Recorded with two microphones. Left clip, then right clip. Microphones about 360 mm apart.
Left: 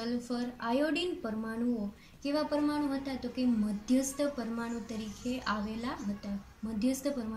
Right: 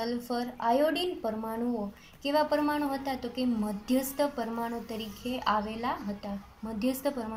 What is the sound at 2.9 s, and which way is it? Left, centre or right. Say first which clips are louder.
Speech: right 4 dB; right.